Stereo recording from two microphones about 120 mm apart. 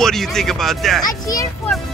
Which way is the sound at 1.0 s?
30° left (ahead or behind).